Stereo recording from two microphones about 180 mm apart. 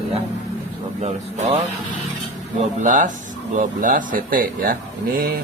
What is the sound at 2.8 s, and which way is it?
Speech, 45° right (ahead or behind).